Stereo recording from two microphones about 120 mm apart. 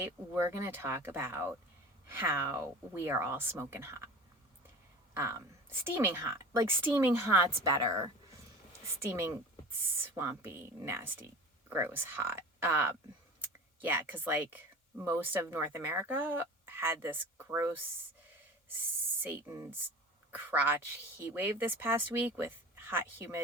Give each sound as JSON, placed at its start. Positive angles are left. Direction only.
{"t": 0.0, "sound": "a woman's voice", "side_deg": -20}
{"t": 5.1, "sound": "a woman's voice", "side_deg": -20}
{"t": 7.6, "sound": "a woman's voice", "side_deg": -30}
{"t": 19.2, "sound": "a woman's voice", "side_deg": -25}
{"t": 20.3, "sound": "speech", "side_deg": -15}